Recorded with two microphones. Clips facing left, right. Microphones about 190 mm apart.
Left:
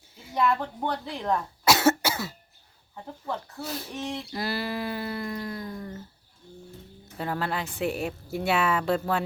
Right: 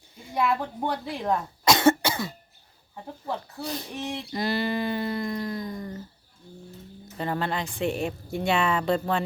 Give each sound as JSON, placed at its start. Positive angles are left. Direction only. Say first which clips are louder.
{"t": 0.3, "sound": "a woman's voice", "louder": "even", "side_deg": -10}
{"t": 1.6, "sound": "cough", "louder": "right 2 dB", "side_deg": 5}
{"t": 2.9, "sound": "a woman's voice", "louder": "right 1 dB", "side_deg": -15}
{"t": 3.6, "sound": "speech", "louder": "right 2 dB", "side_deg": 0}
{"t": 3.9, "sound": "a sound", "louder": "left 2 dB", "side_deg": -20}
{"t": 4.3, "sound": "speech", "louder": "right 7 dB", "side_deg": 5}
{"t": 7.2, "sound": "speech", "louder": "right 1 dB", "side_deg": 5}